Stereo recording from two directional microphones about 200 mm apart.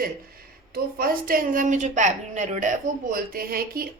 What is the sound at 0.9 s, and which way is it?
A woman's voice, 45° right (ahead or behind).